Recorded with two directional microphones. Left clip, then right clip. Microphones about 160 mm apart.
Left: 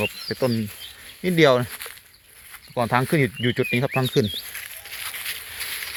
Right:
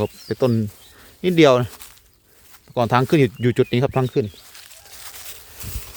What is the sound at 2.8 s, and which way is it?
Speech, 60° right (ahead or behind).